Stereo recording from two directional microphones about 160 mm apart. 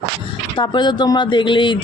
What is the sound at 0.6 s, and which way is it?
Speech, 30° left (ahead or behind).